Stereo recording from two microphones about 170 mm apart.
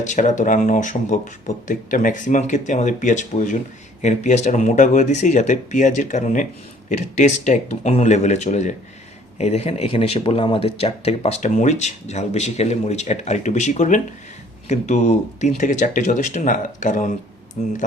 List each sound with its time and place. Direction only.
0.0 s speech: 45° left (ahead or behind)